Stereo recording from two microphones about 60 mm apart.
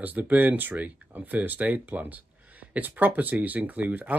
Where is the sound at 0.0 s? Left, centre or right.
Right.